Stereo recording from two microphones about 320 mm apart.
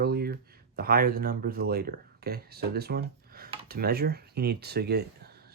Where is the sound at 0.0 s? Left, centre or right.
Right.